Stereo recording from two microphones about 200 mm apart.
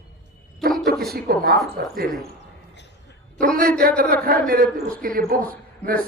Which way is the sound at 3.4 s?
45° right (ahead or behind).